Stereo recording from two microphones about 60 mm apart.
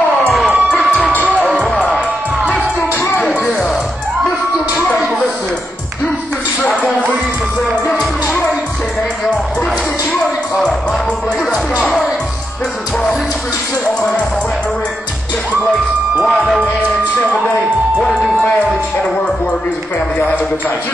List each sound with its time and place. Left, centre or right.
0.5 s cheering: centre
7.9 s music: centre
16.2 s speech: centre